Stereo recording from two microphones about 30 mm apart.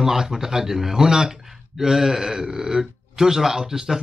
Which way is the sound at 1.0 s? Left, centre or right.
Right.